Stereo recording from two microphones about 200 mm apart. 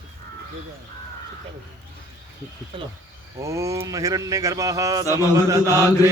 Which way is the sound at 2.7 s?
25° right (ahead or behind).